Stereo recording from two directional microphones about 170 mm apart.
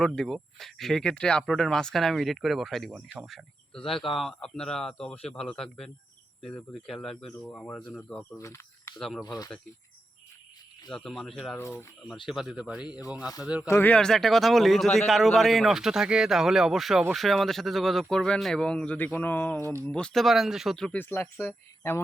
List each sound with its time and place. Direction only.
0.0 s speech: 5° left (ahead or behind)
8.4 s a sound: 15° left (ahead or behind)
9.0 s speech: centre (ahead or behind)
9.2 s speech: 20° left (ahead or behind)
10.8 s speech: 5° left (ahead or behind)
11.5 s speech: 15° left (ahead or behind)
12.2 s speech: centre (ahead or behind)
13.1 s speech: 20° left (ahead or behind)
13.4 s speech: 5° right (ahead or behind)
13.7 s speech: 10° left (ahead or behind)